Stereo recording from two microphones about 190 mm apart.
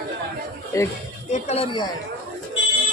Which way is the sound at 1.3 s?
35° left (ahead or behind).